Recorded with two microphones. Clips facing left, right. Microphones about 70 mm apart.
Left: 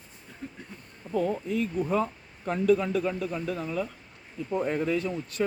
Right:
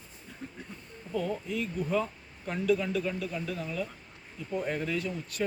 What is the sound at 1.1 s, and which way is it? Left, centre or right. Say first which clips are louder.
Speech: left 5 dB; left.